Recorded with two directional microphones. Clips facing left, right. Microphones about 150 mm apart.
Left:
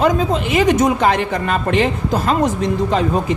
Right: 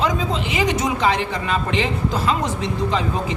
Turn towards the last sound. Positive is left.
turn(degrees=50)  # may be behind; listen again after turning